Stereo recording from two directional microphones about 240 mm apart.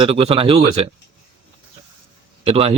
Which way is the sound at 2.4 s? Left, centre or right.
Right.